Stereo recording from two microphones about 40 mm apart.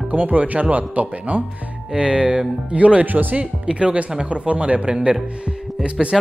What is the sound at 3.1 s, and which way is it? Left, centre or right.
Speech, right.